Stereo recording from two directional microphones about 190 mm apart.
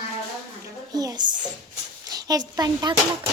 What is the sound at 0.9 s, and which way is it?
A woman's voice, 20° right (ahead or behind).